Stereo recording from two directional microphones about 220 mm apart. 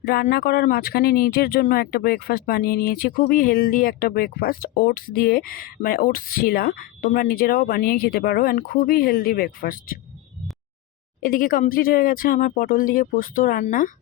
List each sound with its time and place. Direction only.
0.0 s speech: 45° left (ahead or behind)
11.2 s speech: 40° left (ahead or behind)